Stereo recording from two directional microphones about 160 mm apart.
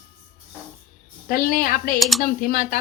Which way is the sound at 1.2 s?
65° left (ahead or behind).